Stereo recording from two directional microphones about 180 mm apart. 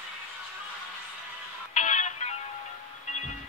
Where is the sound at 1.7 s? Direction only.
40° left (ahead or behind).